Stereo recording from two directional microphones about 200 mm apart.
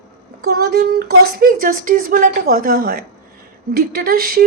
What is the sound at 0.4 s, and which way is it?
Speech, 50° right (ahead or behind).